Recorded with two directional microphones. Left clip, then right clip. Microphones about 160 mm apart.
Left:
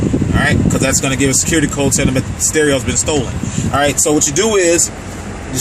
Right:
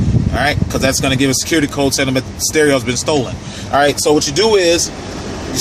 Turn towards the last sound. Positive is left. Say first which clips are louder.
# right 1 dB
turn(degrees=15)  # may be behind; listen again after turning